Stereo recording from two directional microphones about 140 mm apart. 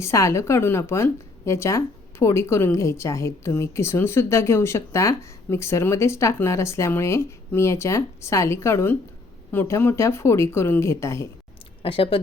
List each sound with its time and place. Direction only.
0.0 s a woman's voice: 20° left (ahead or behind)
11.8 s speech: 40° left (ahead or behind)